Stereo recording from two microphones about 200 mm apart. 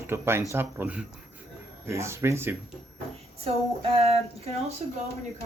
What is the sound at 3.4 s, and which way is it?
Speech, 30° right (ahead or behind).